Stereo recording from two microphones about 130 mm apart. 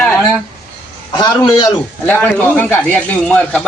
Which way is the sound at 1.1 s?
40° left (ahead or behind).